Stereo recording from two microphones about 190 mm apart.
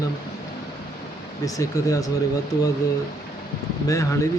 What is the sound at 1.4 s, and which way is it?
Speech, 15° left (ahead or behind).